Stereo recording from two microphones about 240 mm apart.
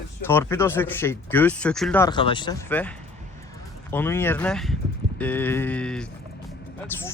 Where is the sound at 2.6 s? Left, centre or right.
Centre.